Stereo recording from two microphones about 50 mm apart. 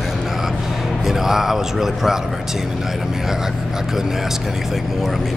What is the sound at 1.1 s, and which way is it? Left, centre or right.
A man's voice, centre.